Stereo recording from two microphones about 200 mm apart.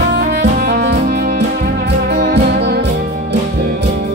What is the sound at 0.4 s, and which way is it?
Saxophone, 55° right (ahead or behind).